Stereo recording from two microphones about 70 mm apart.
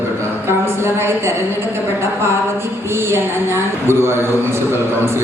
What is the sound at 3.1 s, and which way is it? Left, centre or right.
A woman's voice, right.